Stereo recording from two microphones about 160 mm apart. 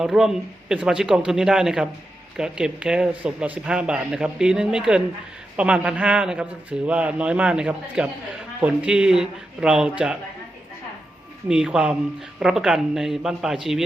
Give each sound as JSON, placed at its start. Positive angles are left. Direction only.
{"t": 0.0, "sound": "a man's voice", "side_deg": -5}
{"t": 11.4, "sound": "speech", "side_deg": -5}